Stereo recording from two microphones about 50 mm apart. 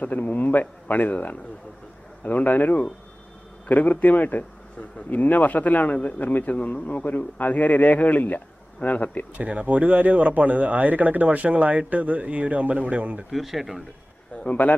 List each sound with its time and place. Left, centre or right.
0.0 s speech: left
2.2 s speech: left
9.4 s speech: right
13.3 s speech: centre
14.4 s speech: left